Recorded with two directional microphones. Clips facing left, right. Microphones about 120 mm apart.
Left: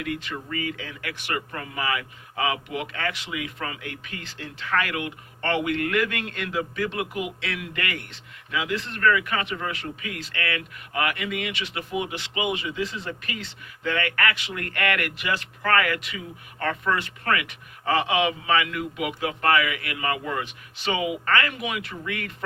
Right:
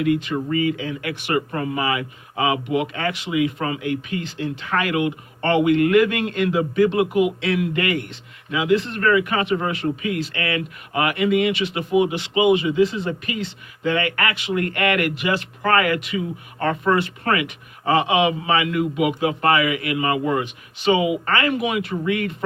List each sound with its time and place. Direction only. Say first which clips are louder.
0.0 s speech: right 11 dB; 20° right (ahead or behind)